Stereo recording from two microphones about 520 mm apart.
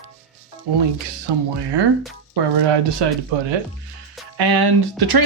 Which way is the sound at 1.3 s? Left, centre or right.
Right.